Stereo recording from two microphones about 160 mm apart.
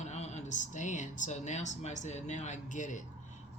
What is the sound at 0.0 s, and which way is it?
Speech, 45° left (ahead or behind).